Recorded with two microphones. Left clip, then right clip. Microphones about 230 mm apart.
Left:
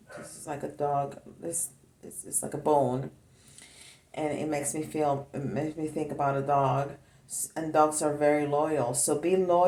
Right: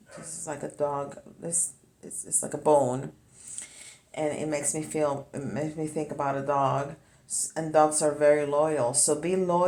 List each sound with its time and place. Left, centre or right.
0.4 s speech: centre